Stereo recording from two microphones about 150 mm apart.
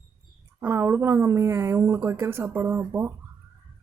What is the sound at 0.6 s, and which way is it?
Speech, 15° right (ahead or behind).